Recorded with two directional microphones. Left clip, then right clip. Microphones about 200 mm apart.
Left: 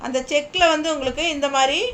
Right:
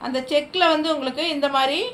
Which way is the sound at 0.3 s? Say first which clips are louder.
Left 1 dB; 15° left (ahead or behind).